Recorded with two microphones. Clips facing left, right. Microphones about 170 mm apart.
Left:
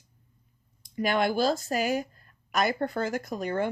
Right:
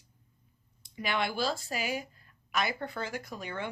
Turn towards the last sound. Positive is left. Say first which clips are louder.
# left 9 dB
turn(degrees=45)  # may be behind; listen again after turning